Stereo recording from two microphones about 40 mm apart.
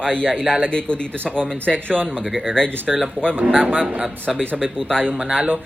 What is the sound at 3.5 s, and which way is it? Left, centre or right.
Speech, right.